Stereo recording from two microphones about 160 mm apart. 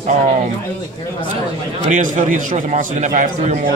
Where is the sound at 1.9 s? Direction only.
55° right (ahead or behind).